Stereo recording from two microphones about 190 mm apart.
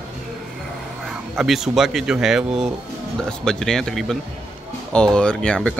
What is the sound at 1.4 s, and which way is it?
Speech, centre (ahead or behind).